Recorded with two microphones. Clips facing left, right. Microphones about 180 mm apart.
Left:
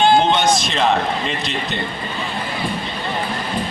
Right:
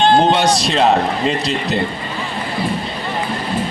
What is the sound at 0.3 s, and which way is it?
Speech, 35° right (ahead or behind).